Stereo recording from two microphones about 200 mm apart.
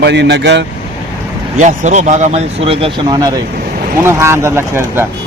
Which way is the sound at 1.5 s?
35° right (ahead or behind).